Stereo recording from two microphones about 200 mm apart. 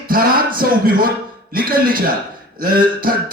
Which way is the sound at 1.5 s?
45° right (ahead or behind).